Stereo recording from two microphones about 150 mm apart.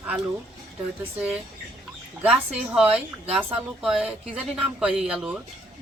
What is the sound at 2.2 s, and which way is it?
Speech, 5° right (ahead or behind).